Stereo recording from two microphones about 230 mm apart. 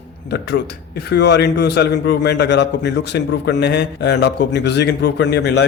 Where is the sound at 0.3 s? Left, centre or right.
Left.